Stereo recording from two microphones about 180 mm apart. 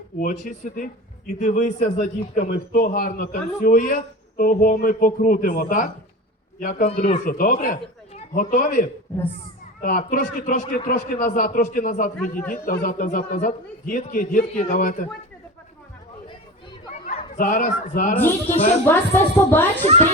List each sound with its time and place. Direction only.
0.2 s a man's voice: 45° left (ahead or behind)
16.9 s chatter: 35° left (ahead or behind)
17.3 s a man's voice: 50° left (ahead or behind)
18.2 s a woman's voice: 10° left (ahead or behind)